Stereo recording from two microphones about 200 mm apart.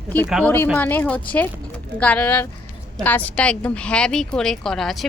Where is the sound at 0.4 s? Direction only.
10° left (ahead or behind).